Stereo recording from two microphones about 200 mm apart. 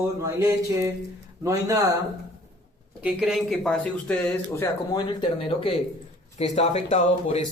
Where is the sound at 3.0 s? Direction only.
Centre (ahead or behind).